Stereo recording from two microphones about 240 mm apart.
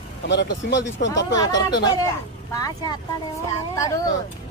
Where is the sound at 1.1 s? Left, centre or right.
Centre.